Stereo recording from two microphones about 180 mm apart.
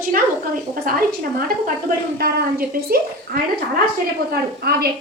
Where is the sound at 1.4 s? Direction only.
55° right (ahead or behind).